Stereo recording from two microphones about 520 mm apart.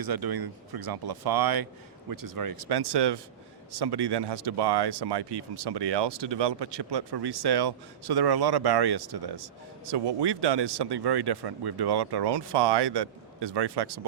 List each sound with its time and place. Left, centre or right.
0.0 s speech: right